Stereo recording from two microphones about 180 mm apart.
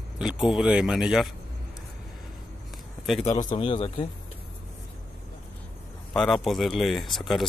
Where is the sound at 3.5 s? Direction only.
30° left (ahead or behind).